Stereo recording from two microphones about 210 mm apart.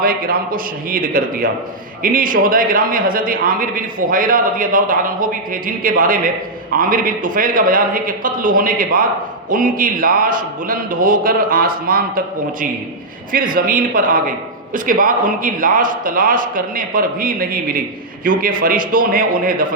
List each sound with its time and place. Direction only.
0.0 s a man's voice: 45° right (ahead or behind)